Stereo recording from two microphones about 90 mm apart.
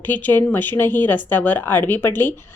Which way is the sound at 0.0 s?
20° left (ahead or behind).